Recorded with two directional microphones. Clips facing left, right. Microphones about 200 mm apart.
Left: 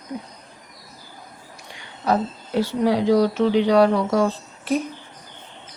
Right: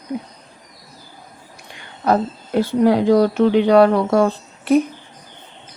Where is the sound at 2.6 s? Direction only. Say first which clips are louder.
Right 5 dB; 55° right (ahead or behind).